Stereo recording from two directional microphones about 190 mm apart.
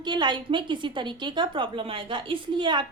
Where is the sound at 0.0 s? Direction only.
25° right (ahead or behind).